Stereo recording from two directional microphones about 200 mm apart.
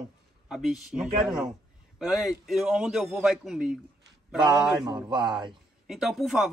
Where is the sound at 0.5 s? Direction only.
5° right (ahead or behind).